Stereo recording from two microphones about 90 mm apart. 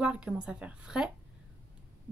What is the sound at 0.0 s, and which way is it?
A woman's voice, 15° right (ahead or behind).